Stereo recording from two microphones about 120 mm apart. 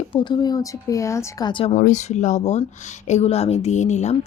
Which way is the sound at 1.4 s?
50° left (ahead or behind).